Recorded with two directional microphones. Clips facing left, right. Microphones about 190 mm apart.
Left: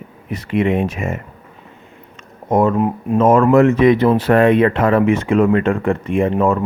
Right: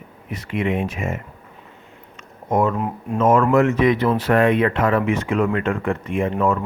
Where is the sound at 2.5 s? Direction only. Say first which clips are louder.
Left 4 dB; 35° left (ahead or behind).